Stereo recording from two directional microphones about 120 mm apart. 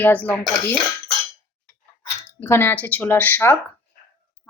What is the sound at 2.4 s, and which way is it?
A woman's voice, 20° left (ahead or behind).